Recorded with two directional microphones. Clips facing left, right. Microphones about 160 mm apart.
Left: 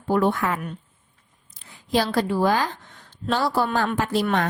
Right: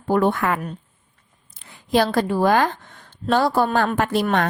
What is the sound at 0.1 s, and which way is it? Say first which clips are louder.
Speech: right 2 dB; 55° right (ahead or behind).